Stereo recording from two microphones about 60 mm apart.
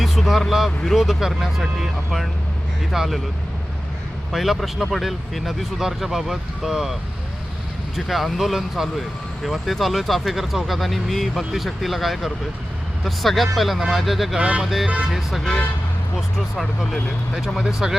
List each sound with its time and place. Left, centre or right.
0.0 s speech: centre
4.3 s speech: centre
7.9 s speech: centre
14.3 s speech: right
14.6 s speech: centre
17.6 s speech: centre